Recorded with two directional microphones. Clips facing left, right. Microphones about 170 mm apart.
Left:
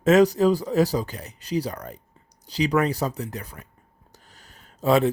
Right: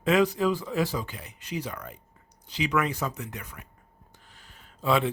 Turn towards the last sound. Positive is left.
turn(degrees=40)  # may be behind; listen again after turning